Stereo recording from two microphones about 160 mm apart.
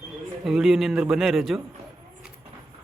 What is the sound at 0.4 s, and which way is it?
A man's voice, centre (ahead or behind).